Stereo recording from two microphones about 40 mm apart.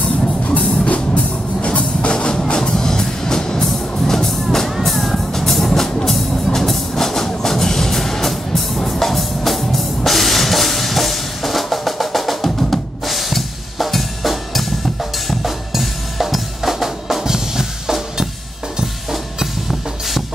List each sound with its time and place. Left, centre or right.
0.6 s music: left; by 12.5 s centre
12.5 s drum kit: centre
19.4 s music: centre